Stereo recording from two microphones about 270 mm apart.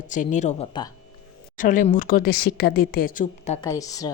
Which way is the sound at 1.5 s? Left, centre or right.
Left.